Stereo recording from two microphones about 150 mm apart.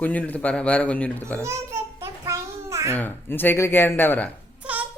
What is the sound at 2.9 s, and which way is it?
Speech, 15° left (ahead or behind).